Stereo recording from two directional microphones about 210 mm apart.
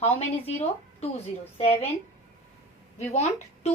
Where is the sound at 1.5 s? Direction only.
30° left (ahead or behind).